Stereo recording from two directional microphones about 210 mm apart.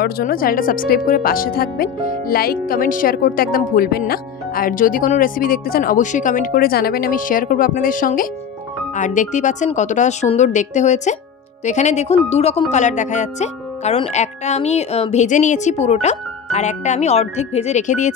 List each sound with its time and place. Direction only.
0.0 s speech: 45° left (ahead or behind)